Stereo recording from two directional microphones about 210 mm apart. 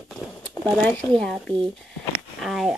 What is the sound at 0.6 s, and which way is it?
Speech, 5° left (ahead or behind).